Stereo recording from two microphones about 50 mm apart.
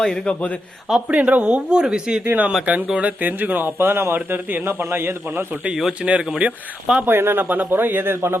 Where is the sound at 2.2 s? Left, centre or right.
Right.